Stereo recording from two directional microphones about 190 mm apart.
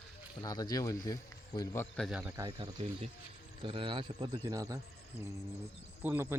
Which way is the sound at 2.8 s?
30° right (ahead or behind).